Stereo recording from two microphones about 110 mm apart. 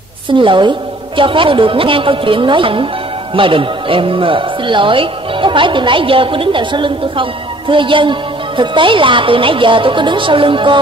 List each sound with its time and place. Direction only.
0.3 s a woman's voice: 50° right (ahead or behind)